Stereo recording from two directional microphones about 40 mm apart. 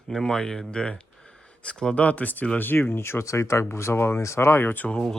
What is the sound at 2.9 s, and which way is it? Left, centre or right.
Speech, left.